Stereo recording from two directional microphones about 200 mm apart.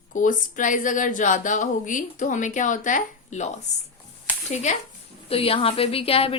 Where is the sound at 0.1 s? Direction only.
40° left (ahead or behind).